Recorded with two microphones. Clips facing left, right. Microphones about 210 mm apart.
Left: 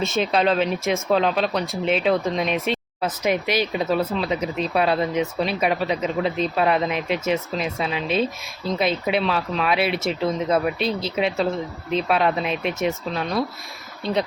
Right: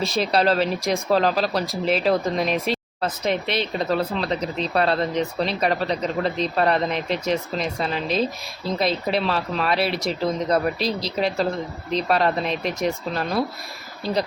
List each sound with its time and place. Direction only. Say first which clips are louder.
0.2 s speech: even; centre (ahead or behind)
3.4 s speech: left 2 dB; 30° right (ahead or behind)
3.7 s speech: left 1 dB; 5° left (ahead or behind)
10.8 s speech: left 1 dB; 35° right (ahead or behind)
11.1 s speech: left 1 dB; centre (ahead or behind)